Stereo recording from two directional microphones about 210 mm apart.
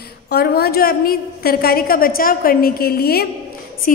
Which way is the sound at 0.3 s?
50° left (ahead or behind).